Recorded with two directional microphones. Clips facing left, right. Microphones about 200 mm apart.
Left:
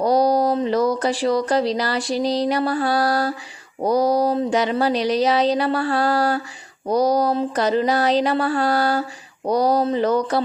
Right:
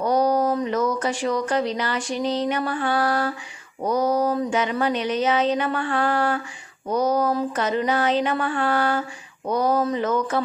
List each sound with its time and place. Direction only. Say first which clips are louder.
0.0 s speech: left 3 dB; 35° left (ahead or behind)